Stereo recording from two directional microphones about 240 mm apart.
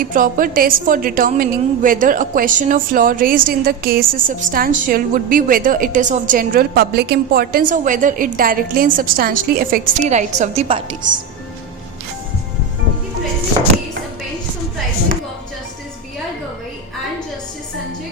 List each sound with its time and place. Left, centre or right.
0.0 s a woman's voice: right